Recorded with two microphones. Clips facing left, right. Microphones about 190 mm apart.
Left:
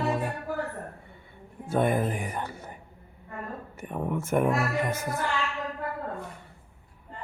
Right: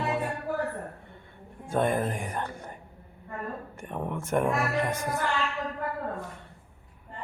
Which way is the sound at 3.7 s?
5° left (ahead or behind).